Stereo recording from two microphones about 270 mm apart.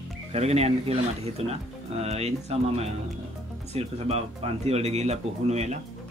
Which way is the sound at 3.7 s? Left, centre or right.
Right.